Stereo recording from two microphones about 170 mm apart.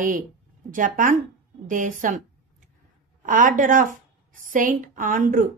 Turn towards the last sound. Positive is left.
turn(degrees=-50)  # may be behind; listen again after turning